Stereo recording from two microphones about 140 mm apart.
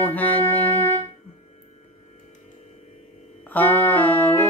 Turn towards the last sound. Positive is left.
turn(degrees=10)  # may be behind; listen again after turning